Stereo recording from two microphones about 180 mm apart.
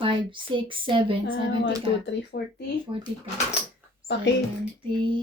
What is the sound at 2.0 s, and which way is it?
Speech, 65° left (ahead or behind).